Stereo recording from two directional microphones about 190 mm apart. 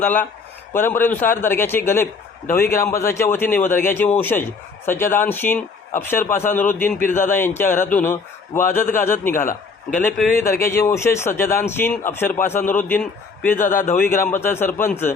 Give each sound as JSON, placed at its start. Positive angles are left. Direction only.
{"t": 0.0, "sound": "a man's voice", "side_deg": 10}
{"t": 9.4, "sound": "a man's voice", "side_deg": 45}
{"t": 10.6, "sound": "a man's voice", "side_deg": 15}
{"t": 13.6, "sound": "a man's voice", "side_deg": 45}
{"t": 13.9, "sound": "a man's voice", "side_deg": 10}